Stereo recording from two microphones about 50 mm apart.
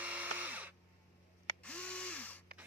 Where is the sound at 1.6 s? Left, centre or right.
Left.